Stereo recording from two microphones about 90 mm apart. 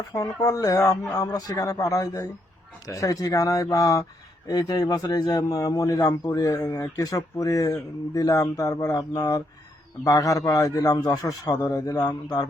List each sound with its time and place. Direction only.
0.1 s a man's voice: 40° left (ahead or behind)